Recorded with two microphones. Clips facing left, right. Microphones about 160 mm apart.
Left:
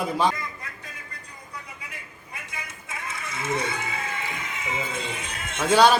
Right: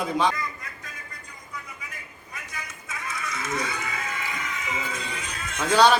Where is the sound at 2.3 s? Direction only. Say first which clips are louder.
Even; 25° left (ahead or behind).